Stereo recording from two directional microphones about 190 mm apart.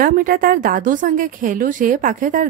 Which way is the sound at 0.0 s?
50° right (ahead or behind).